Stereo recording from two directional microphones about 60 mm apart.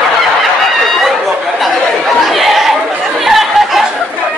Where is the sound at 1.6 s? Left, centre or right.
Centre.